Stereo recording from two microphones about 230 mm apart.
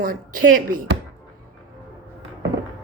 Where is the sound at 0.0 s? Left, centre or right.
Right.